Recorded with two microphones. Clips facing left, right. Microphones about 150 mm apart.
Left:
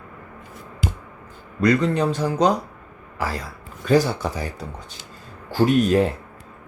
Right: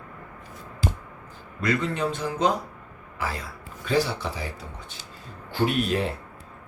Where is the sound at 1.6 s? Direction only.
40° left (ahead or behind).